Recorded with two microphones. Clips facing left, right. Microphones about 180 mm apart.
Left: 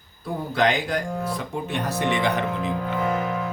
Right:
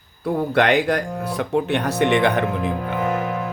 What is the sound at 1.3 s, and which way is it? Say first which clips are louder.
Speech: right 7 dB; 70° right (ahead or behind).